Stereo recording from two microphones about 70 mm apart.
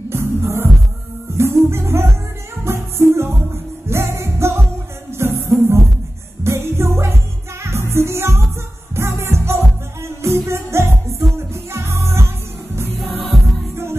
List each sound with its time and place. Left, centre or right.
0.1 s music: right